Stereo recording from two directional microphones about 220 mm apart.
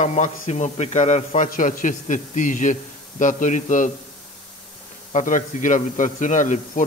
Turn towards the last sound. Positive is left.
turn(degrees=35)  # may be behind; listen again after turning